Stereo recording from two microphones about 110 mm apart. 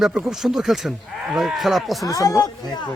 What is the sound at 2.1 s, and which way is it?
Speech, 30° left (ahead or behind).